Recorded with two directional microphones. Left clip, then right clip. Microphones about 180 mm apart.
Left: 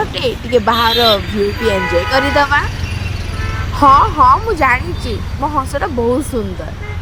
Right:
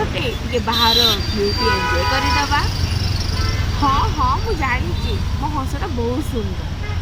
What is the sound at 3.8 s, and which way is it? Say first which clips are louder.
Speech: left 10 dB; 35° left (ahead or behind).